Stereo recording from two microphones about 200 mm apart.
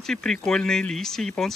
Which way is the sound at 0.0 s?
5° left (ahead or behind).